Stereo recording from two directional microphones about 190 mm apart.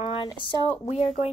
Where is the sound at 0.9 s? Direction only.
35° left (ahead or behind).